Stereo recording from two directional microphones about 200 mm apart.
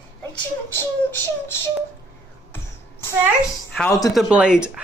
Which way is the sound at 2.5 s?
10° left (ahead or behind).